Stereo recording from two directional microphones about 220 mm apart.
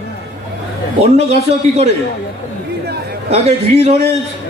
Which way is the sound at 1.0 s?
30° right (ahead or behind).